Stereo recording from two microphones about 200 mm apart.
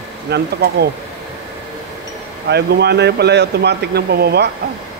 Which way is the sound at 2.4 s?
55° right (ahead or behind).